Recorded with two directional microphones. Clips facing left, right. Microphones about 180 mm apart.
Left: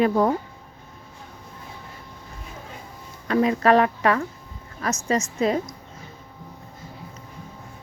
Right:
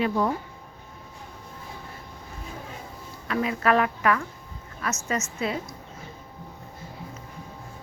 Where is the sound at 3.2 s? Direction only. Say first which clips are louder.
Left 5 dB; 35° left (ahead or behind).